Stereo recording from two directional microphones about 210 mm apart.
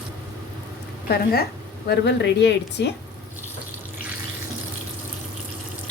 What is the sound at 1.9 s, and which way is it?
A woman's voice, 55° left (ahead or behind).